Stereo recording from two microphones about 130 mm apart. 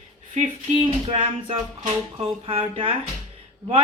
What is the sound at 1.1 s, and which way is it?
Speech, 45° right (ahead or behind).